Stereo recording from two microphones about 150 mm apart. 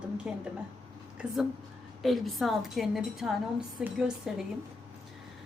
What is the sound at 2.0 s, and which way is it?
A woman's voice, centre (ahead or behind).